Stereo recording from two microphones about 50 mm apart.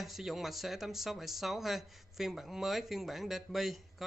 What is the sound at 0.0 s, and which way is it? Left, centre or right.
Speech, centre.